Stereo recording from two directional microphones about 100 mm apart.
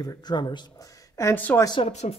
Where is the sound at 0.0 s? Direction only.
45° left (ahead or behind).